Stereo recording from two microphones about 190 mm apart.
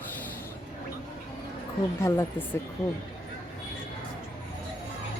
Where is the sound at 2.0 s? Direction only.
15° left (ahead or behind).